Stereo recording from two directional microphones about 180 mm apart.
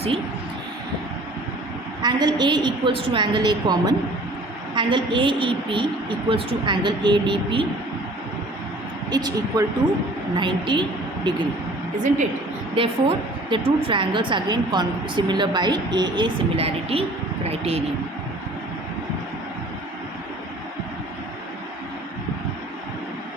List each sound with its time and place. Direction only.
2.0 s a woman's voice: 25° right (ahead or behind)
9.0 s a woman's voice: 20° right (ahead or behind)
12.7 s a woman's voice: 30° right (ahead or behind)